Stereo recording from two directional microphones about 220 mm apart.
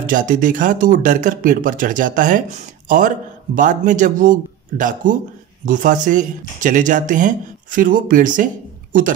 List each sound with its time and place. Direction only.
0.0 s speech: 35° right (ahead or behind)